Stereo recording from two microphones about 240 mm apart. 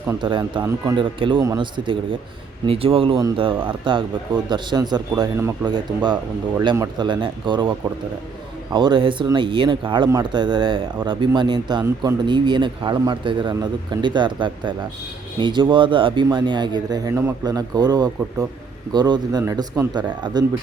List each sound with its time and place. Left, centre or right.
0.1 s speech: centre
8.7 s speech: centre